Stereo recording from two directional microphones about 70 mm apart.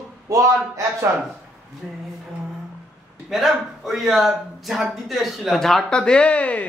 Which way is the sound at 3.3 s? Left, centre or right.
Centre.